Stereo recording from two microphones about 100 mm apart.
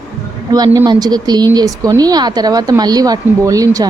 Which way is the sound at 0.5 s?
40° right (ahead or behind).